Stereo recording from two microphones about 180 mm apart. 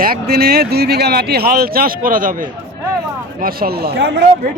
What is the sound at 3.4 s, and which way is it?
Speech, 60° right (ahead or behind).